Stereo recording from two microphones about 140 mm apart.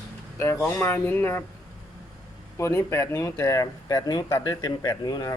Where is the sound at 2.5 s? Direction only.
20° left (ahead or behind).